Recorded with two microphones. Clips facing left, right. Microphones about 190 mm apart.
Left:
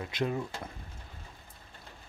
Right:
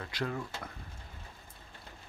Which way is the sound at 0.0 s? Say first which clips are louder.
Left 4 dB; 20° left (ahead or behind).